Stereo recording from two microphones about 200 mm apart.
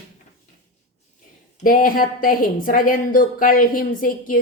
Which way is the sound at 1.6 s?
45° left (ahead or behind).